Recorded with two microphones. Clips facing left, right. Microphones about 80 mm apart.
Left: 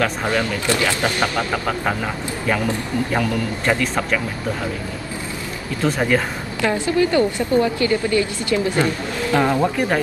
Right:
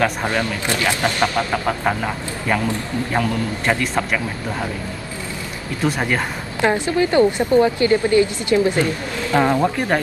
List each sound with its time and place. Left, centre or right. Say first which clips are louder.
0.0 s speech: even; centre
3.1 s a man's voice: right 3 dB; centre
5.9 s a man's voice: left 2 dB; centre
6.6 s speech: right 1 dB; right
9.3 s a man's voice: right 1 dB; centre